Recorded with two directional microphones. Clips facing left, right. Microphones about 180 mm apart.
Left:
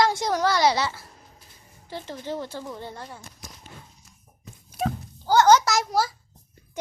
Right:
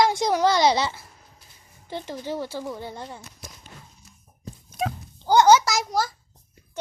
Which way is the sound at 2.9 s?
20° right (ahead or behind).